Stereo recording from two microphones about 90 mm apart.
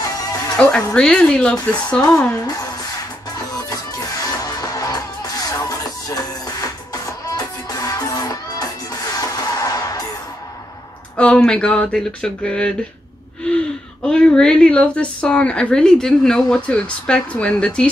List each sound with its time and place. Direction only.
0.6 s speech: 10° left (ahead or behind)
3.3 s music: 45° left (ahead or behind)
11.1 s speech: 10° left (ahead or behind)